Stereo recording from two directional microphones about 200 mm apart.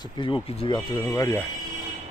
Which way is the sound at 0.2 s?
25° left (ahead or behind).